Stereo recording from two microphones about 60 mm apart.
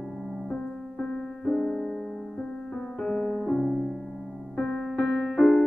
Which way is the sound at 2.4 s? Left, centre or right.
Centre.